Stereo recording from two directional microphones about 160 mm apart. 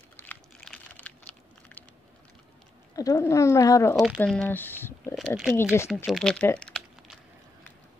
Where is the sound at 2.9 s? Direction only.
20° left (ahead or behind).